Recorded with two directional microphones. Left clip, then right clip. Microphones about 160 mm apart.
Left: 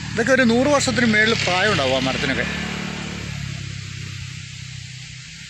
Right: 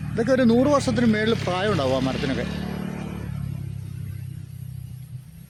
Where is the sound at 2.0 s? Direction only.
15° left (ahead or behind).